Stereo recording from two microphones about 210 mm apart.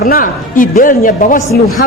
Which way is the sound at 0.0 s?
45° left (ahead or behind).